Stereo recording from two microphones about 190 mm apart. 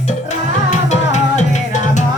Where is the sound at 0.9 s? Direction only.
40° left (ahead or behind).